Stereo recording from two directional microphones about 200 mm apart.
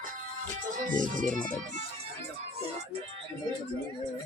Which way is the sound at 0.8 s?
40° right (ahead or behind).